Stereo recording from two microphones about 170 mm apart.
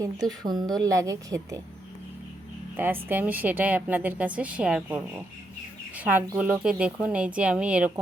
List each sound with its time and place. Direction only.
0.4 s a woman's voice: 25° right (ahead or behind)
2.7 s speech: 10° right (ahead or behind)